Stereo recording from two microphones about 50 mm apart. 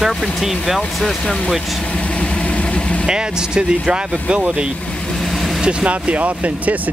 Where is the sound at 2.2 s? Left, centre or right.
Left.